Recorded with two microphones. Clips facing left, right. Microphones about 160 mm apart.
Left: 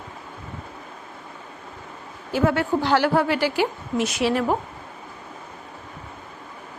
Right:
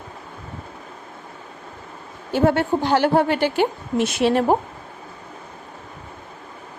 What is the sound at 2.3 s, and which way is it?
A woman's voice, 30° right (ahead or behind).